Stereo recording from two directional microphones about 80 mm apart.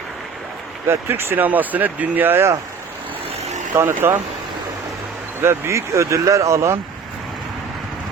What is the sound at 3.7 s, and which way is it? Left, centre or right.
Speech, right.